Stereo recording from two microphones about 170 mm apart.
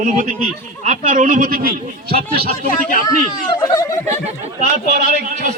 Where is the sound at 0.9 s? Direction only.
50° right (ahead or behind).